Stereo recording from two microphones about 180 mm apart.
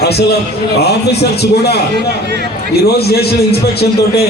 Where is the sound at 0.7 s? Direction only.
65° left (ahead or behind).